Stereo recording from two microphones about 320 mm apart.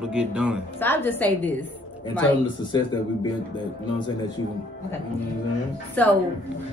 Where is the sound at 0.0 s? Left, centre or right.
Centre.